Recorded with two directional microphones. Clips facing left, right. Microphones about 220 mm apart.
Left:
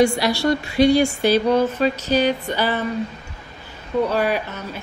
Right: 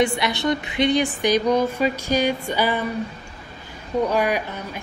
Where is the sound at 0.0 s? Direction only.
20° right (ahead or behind).